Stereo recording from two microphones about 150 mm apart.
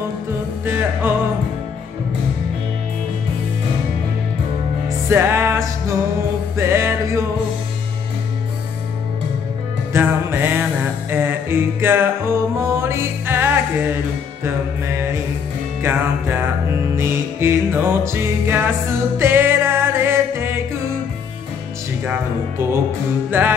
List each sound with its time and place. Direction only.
0.7 s music: 15° right (ahead or behind)
4.8 s music: 15° right (ahead or behind)
9.9 s music: 15° right (ahead or behind)
23.3 s music: 15° right (ahead or behind)